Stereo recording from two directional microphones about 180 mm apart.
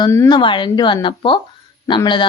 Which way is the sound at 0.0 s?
20° left (ahead or behind).